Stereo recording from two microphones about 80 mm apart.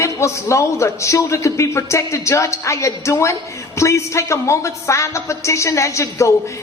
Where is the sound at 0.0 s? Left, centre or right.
Left.